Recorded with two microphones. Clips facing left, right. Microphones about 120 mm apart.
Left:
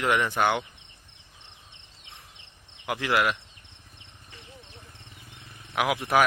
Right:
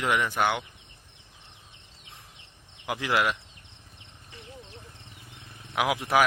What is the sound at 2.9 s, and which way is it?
Speech, 20° right (ahead or behind).